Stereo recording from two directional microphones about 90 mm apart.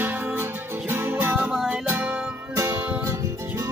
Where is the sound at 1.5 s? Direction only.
5° right (ahead or behind).